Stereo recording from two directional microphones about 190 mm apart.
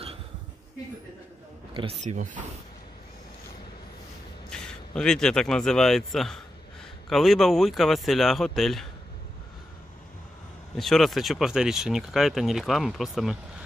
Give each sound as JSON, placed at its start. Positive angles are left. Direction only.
{"t": 1.7, "sound": "speech", "side_deg": -25}
{"t": 2.0, "sound": "speech", "side_deg": -40}
{"t": 4.5, "sound": "speech", "side_deg": 5}
{"t": 10.8, "sound": "speech", "side_deg": 0}